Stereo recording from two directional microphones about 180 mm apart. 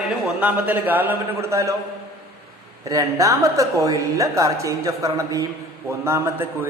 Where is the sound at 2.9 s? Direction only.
20° right (ahead or behind).